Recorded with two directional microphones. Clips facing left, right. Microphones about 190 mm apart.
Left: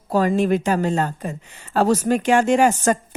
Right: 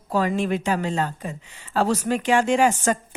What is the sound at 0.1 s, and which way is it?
A woman's voice, 45° left (ahead or behind).